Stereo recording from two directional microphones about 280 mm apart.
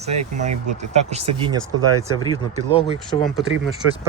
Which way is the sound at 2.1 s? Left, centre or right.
Centre.